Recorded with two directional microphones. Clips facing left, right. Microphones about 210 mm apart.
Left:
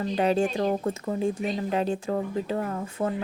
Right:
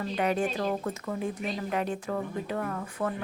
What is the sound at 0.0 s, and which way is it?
A woman's voice, 30° left (ahead or behind).